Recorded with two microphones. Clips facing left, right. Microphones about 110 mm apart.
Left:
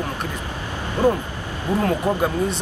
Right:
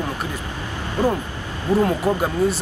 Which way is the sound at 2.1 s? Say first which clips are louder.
Right 1 dB; 20° left (ahead or behind).